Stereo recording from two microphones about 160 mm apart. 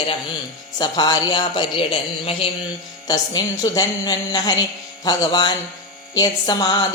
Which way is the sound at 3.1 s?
25° left (ahead or behind).